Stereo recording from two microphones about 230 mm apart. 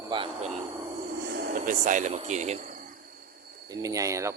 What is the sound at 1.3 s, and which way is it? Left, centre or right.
Speech, right.